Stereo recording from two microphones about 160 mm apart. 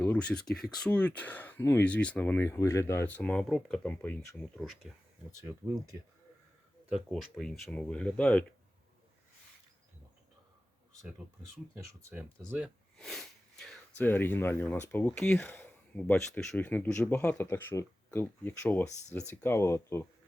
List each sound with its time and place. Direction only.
0.0 s speech: 10° left (ahead or behind)
5.4 s speech: 15° right (ahead or behind)
6.8 s speech: 5° right (ahead or behind)
13.0 s sniff: centre (ahead or behind)
13.9 s speech: 10° left (ahead or behind)